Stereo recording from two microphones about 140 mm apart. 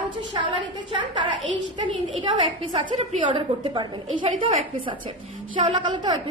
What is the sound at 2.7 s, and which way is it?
Speech, 50° right (ahead or behind).